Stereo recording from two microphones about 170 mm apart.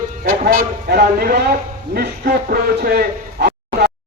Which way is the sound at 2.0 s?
65° right (ahead or behind).